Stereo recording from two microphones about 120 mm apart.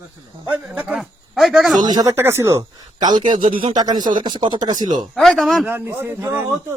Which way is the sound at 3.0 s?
35° right (ahead or behind).